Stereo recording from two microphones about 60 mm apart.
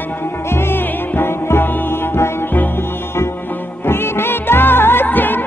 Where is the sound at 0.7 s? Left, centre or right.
Left.